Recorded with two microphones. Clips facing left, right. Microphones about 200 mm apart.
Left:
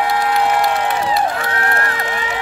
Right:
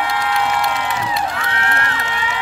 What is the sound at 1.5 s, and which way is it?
Run, 40° left (ahead or behind).